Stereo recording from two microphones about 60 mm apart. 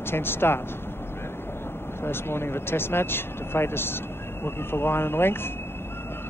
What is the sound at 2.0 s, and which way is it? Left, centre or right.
Speech, left.